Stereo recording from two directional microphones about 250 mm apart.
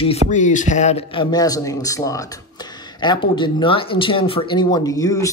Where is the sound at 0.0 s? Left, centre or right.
Left.